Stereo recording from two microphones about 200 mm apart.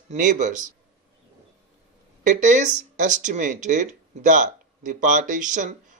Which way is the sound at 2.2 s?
40° right (ahead or behind).